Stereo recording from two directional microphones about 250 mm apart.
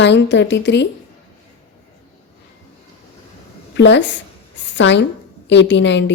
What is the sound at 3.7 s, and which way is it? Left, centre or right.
Speech, left.